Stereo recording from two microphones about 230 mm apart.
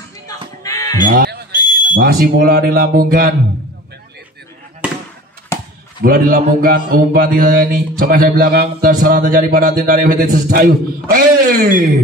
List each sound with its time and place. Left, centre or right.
0.7 s crow: centre
1.0 s a man's voice: right
5.5 s a sound: centre
6.0 s a man's voice: right